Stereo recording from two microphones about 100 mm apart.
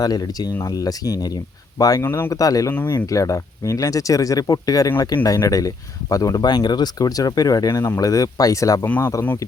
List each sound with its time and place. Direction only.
0.0 s speech: 40° left (ahead or behind)
2.0 s speech: 25° left (ahead or behind)